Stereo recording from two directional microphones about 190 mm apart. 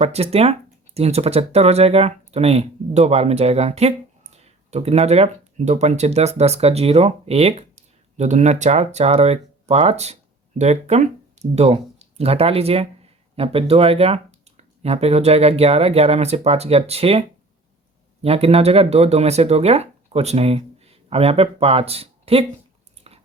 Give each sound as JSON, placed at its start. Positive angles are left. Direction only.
{"t": 0.0, "sound": "speech", "side_deg": -35}
{"t": 23.1, "sound": "chewing", "side_deg": -30}